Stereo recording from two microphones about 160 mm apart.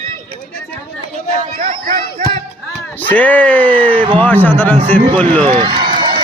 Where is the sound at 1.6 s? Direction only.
60° right (ahead or behind).